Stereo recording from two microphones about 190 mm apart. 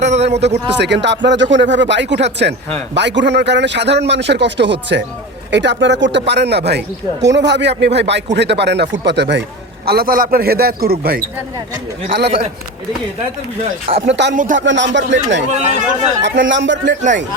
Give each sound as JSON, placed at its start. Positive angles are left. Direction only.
{"t": 0.0, "sound": "a man's voice", "side_deg": -35}
{"t": 0.7, "sound": "a man's voice", "side_deg": -65}
{"t": 9.8, "sound": "a man's voice", "side_deg": -55}
{"t": 14.1, "sound": "a man's voice", "side_deg": -65}
{"t": 14.3, "sound": "a man's voice", "side_deg": -45}
{"t": 14.6, "sound": "a man's voice", "side_deg": -70}
{"t": 15.5, "sound": "speech", "side_deg": -35}
{"t": 16.2, "sound": "a man's voice", "side_deg": -70}